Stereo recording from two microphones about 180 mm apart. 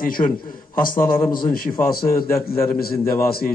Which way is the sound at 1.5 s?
55° left (ahead or behind).